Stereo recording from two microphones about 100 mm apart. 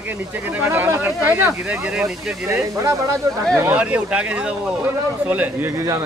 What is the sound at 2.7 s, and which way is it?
Speech, 35° right (ahead or behind).